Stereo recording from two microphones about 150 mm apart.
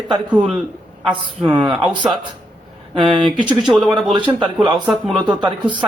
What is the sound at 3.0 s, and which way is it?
Speech, 35° right (ahead or behind).